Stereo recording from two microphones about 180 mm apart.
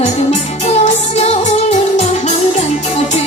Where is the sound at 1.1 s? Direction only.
35° left (ahead or behind).